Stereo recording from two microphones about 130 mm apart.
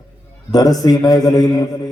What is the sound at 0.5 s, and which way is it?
Mantra, 30° left (ahead or behind).